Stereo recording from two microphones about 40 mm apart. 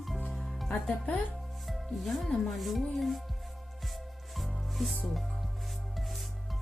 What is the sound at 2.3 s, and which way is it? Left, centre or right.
Speech, centre.